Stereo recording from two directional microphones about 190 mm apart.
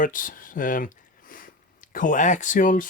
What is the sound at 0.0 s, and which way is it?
Speech, 45° left (ahead or behind).